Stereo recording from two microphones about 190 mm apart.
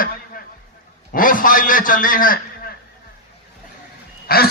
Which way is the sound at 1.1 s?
45° left (ahead or behind).